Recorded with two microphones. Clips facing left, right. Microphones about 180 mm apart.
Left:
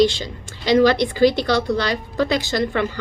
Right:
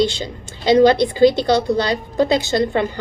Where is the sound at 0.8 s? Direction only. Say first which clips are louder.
Right 3 dB; 25° right (ahead or behind).